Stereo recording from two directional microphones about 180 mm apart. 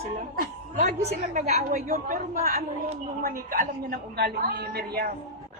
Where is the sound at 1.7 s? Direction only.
50° right (ahead or behind).